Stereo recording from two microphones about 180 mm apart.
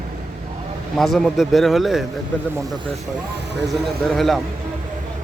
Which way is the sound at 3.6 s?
Centre (ahead or behind).